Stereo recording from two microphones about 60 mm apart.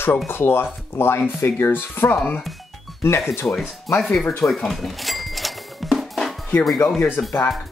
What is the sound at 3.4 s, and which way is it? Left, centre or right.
Speech, left.